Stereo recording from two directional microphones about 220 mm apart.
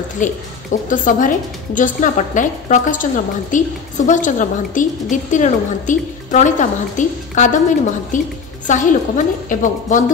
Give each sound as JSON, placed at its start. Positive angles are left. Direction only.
{"t": 0.2, "sound": "a woman's voice", "side_deg": 35}